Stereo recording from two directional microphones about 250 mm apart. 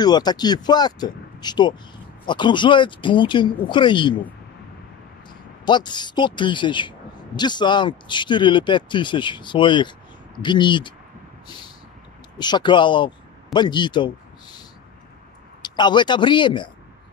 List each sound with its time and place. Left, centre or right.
0.0 s speech: centre
5.7 s speech: centre
12.4 s speech: centre
15.6 s speech: centre